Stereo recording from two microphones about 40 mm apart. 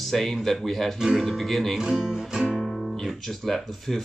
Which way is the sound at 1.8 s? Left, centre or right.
Centre.